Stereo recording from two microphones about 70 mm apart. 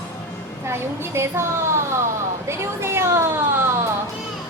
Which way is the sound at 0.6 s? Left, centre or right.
Right.